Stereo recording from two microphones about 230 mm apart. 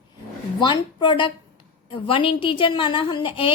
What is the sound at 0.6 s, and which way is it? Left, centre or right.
A woman's voice, centre.